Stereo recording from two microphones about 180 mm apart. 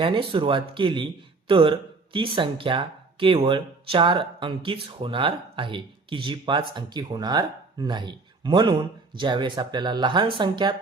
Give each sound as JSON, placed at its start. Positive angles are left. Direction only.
{"t": 0.0, "sound": "speech", "side_deg": -30}